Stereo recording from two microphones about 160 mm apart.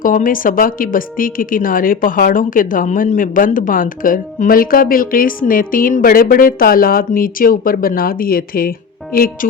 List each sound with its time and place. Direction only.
0.0 s speech: 55° left (ahead or behind)